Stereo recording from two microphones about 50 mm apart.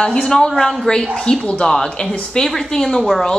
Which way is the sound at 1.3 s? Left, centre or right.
Left.